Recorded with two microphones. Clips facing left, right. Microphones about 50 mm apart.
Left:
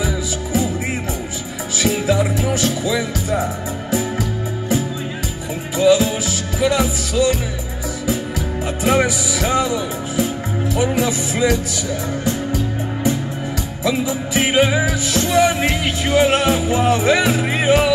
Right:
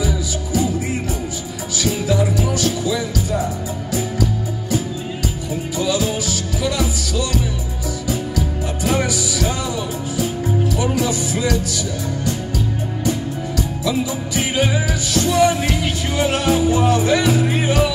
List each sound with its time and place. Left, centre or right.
0.0 s music: left
1.8 s music: left
13.8 s music: left